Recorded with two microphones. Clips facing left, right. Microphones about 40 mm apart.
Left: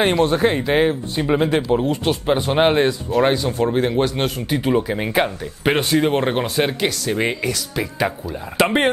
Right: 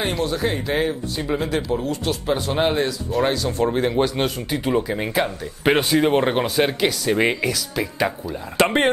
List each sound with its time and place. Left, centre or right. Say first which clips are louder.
0.2 s speech: left 6 dB; left
3.2 s speech: left 3 dB; centre
3.5 s speech: left 1 dB; centre
5.6 s speech: even; centre